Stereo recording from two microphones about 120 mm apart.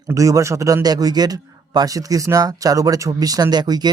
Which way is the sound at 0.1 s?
25° right (ahead or behind).